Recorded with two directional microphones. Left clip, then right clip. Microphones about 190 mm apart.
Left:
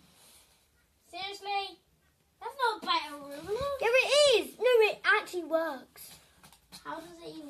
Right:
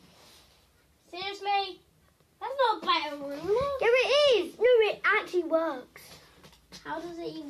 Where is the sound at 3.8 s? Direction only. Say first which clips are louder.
Even; 20° left (ahead or behind).